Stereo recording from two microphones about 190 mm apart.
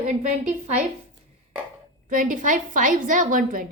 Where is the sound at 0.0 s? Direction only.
40° right (ahead or behind).